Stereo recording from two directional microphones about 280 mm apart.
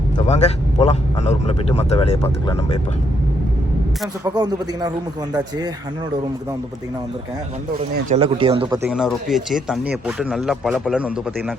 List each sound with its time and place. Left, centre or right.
0.3 s a man's voice: left
4.2 s speech: centre
8.1 s a man's voice: centre
8.9 s speech: centre